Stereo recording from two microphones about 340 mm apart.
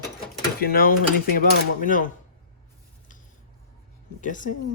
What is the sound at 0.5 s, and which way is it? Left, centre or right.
Speech, left.